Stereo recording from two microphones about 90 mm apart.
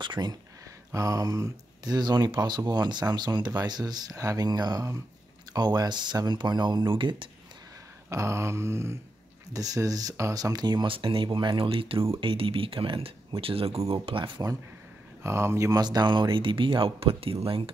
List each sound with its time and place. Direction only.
0.0 s speech: 55° right (ahead or behind)
0.9 s speech: 40° right (ahead or behind); by 7.2 s 65° right (ahead or behind)
8.1 s a sound: 35° right (ahead or behind)
9.5 s speech: 40° right (ahead or behind); by 14.3 s 80° right
15.2 s a sound: 30° right (ahead or behind)
15.8 s speech: 50° right (ahead or behind); by 17.7 s 90° right